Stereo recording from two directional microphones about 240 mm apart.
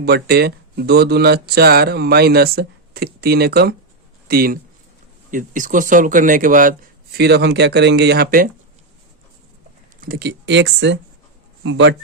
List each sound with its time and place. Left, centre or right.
0.0 s speech: right
10.0 s speech: right